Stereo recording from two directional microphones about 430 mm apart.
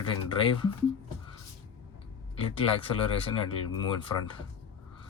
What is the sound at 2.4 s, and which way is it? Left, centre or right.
Speech, centre.